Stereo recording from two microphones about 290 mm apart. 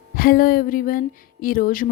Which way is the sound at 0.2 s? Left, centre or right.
Left.